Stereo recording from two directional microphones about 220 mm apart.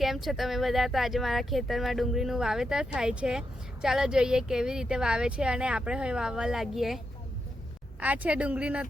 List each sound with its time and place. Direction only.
0.0 s speech: centre (ahead or behind)